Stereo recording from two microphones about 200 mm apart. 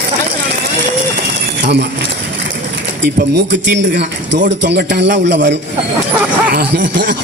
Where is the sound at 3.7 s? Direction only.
60° right (ahead or behind).